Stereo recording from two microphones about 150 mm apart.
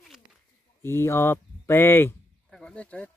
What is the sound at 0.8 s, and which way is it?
Speech, 15° left (ahead or behind).